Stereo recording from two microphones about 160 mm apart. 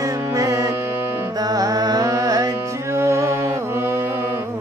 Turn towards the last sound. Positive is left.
turn(degrees=-15)  # may be behind; listen again after turning